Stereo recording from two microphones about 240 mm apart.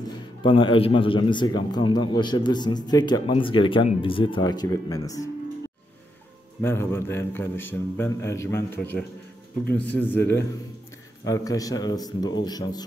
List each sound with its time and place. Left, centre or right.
0.0 s a man's voice: centre
6.6 s a man's voice: centre